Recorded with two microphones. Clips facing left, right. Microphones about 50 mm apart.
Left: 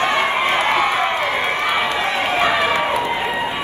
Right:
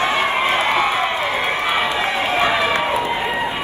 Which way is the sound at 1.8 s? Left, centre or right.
Left.